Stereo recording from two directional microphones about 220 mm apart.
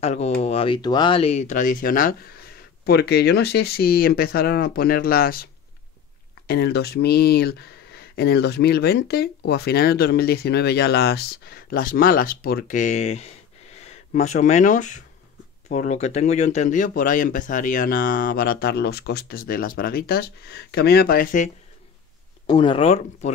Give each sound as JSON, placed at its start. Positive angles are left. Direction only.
{"t": 0.0, "sound": "speech", "side_deg": 30}
{"t": 22.5, "sound": "speech", "side_deg": 20}